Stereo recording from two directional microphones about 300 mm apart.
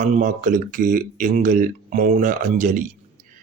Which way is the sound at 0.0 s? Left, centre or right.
Right.